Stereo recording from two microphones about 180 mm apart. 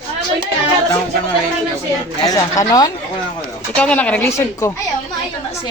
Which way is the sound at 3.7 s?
5° left (ahead or behind).